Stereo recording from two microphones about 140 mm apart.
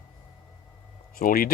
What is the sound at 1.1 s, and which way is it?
Speech, 90° left.